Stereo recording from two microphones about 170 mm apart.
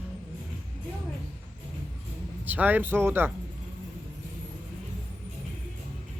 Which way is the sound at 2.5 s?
10° right (ahead or behind).